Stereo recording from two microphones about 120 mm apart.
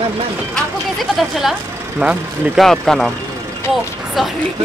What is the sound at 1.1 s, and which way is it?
Speech, centre (ahead or behind).